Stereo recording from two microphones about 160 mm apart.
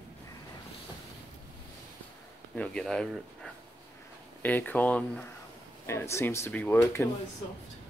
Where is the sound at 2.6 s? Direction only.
5° left (ahead or behind).